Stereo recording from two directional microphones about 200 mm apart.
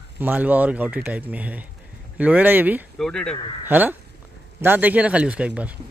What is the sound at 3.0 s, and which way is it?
Speech, 5° left (ahead or behind).